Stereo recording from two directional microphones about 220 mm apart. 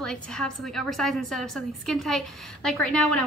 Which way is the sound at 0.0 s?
5° left (ahead or behind).